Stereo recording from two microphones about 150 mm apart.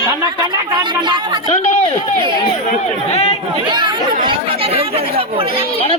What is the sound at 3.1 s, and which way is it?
Chatter, 45° left (ahead or behind).